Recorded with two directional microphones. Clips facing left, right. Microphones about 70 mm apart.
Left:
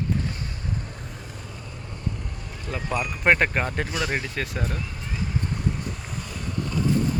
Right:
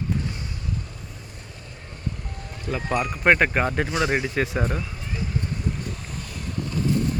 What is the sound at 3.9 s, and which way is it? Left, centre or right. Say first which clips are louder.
Speech: right 4 dB; right.